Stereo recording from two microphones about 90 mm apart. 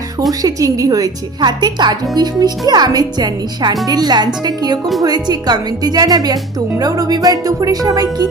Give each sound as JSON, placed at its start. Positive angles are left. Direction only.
{"t": 0.2, "sound": "speech", "side_deg": -40}